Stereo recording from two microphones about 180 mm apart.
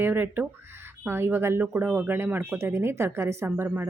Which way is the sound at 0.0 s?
10° right (ahead or behind).